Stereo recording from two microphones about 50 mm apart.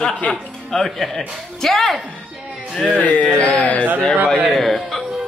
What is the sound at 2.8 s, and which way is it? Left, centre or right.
Speech, left.